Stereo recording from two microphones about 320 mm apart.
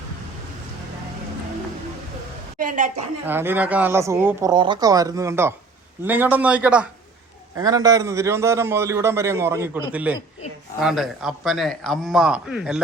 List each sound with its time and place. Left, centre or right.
2.6 s a woman's voice: right
3.2 s a man's voice: centre